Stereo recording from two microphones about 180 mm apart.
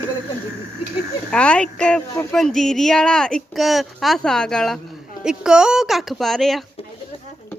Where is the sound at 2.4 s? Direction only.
5° left (ahead or behind).